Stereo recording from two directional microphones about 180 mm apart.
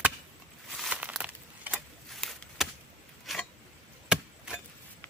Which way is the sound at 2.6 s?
Centre (ahead or behind).